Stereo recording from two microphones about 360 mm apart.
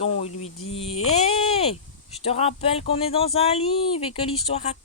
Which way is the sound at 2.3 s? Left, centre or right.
Centre.